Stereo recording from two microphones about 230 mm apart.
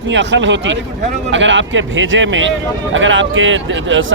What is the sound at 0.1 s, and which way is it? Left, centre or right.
A man's voice, right.